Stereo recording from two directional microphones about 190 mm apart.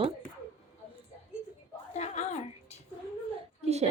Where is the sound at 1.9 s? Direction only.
35° left (ahead or behind).